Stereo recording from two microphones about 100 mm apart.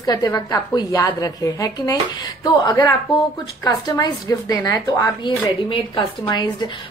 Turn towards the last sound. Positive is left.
turn(degrees=45)  # may be behind; listen again after turning